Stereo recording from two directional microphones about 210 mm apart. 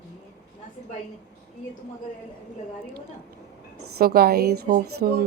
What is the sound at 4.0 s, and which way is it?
Speech, 45° right (ahead or behind).